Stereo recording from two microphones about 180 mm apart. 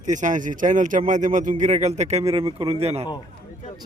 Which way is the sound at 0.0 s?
45° right (ahead or behind).